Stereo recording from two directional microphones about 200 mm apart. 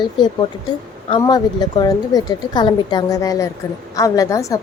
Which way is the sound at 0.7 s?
20° left (ahead or behind).